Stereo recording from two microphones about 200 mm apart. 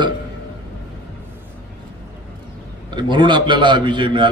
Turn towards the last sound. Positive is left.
turn(degrees=-25)  # may be behind; listen again after turning